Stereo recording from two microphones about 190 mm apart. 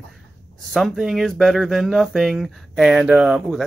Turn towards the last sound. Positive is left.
turn(degrees=0)  # may be behind; listen again after turning